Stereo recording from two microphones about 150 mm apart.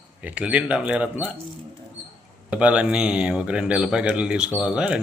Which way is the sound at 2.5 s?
10° right (ahead or behind).